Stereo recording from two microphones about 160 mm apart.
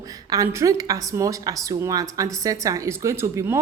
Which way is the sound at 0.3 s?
20° right (ahead or behind).